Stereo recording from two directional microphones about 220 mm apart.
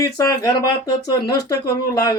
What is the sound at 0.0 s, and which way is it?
Speech, 15° left (ahead or behind).